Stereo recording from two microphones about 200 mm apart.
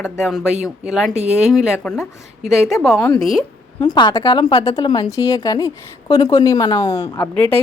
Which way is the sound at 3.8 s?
20° left (ahead or behind).